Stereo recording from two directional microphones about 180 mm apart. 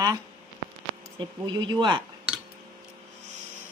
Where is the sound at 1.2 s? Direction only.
25° right (ahead or behind).